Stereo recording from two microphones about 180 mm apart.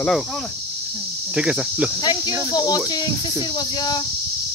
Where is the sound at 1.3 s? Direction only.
5° right (ahead or behind).